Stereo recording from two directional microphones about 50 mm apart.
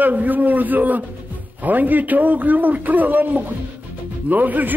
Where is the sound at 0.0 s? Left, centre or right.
Right.